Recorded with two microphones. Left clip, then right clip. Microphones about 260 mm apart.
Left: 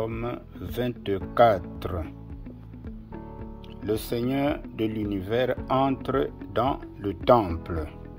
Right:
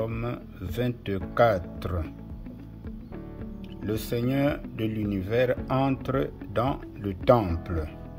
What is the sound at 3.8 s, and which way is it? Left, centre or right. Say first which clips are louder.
Speech: left 2 dB; centre.